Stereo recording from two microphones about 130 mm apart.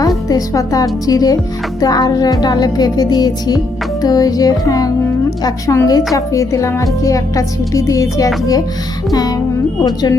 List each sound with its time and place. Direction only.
0.3 s a woman's voice: 25° left (ahead or behind)
1.8 s music: 30° left (ahead or behind)
4.0 s a woman's voice: 30° left (ahead or behind)
9.8 s music: 30° left (ahead or behind)